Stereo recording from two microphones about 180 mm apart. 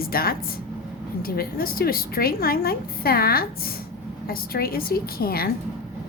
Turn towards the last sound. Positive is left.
turn(degrees=55)  # may be behind; listen again after turning